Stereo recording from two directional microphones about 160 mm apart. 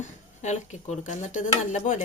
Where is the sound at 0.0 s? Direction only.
45° left (ahead or behind).